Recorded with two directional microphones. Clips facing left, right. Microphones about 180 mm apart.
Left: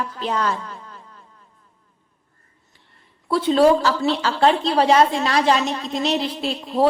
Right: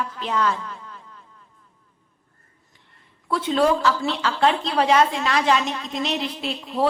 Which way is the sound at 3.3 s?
35° left (ahead or behind).